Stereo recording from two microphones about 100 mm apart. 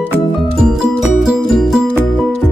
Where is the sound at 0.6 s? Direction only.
Centre (ahead or behind).